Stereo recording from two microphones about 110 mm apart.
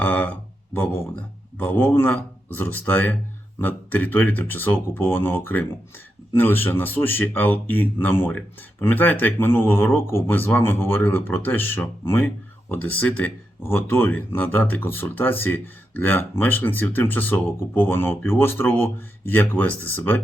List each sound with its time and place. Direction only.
0.0 s speech: 15° left (ahead or behind)